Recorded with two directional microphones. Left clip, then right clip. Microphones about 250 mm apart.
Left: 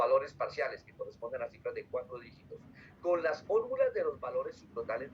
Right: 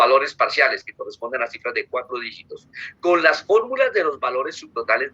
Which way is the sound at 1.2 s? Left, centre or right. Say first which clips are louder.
Right 14 dB; right.